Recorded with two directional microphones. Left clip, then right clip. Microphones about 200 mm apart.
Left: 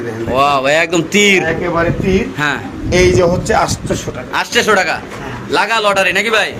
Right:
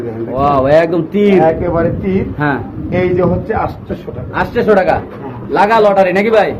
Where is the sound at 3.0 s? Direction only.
70° left (ahead or behind).